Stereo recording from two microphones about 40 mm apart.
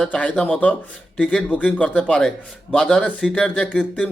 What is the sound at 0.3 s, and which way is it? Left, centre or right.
A man's voice, left.